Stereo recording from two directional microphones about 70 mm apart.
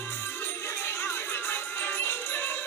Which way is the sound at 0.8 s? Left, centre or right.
Left.